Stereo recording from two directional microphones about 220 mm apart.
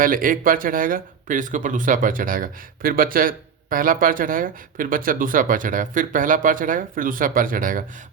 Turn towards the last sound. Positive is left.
turn(degrees=-40)  # may be behind; listen again after turning